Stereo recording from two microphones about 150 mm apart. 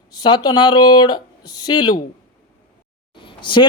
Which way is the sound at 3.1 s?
35° left (ahead or behind).